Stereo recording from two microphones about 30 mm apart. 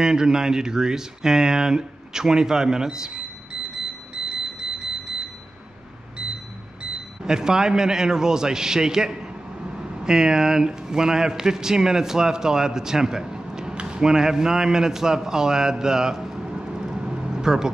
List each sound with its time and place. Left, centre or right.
0.0 s speech: right
7.2 s speech: right
16.4 s vehicle: right